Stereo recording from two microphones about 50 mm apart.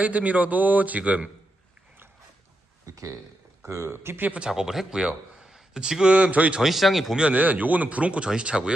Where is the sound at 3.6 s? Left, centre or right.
Right.